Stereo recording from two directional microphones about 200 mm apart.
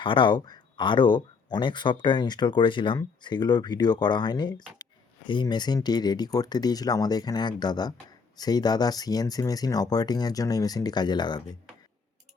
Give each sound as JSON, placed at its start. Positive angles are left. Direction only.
{"t": 0.0, "sound": "speech", "side_deg": 25}